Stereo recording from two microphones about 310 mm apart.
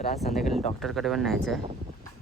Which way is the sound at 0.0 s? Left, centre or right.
Centre.